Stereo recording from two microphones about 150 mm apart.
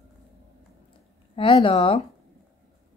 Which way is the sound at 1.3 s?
35° left (ahead or behind).